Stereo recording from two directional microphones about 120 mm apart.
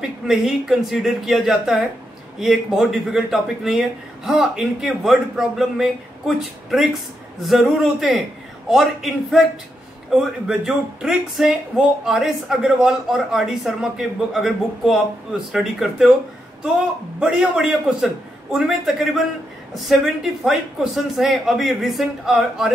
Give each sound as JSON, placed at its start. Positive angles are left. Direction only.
{"t": 0.3, "sound": "speech", "side_deg": 0}
{"t": 10.4, "sound": "speech", "side_deg": -5}
{"t": 17.2, "sound": "speech", "side_deg": -5}